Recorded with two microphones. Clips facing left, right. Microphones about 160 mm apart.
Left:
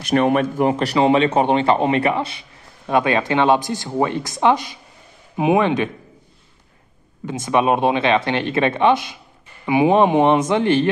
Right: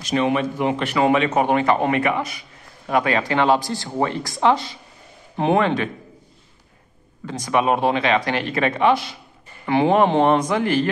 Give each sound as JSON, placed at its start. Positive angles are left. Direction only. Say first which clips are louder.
{"t": 0.0, "sound": "a man's voice", "louder": "left 3 dB", "side_deg": 55}
{"t": 7.2, "sound": "speech", "louder": "left 2 dB", "side_deg": 20}